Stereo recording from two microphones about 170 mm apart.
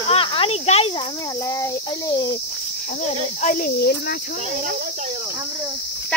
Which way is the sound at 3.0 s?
50° left (ahead or behind).